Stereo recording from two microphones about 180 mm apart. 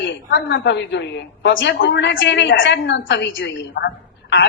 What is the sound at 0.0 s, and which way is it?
A woman's voice, 90° left.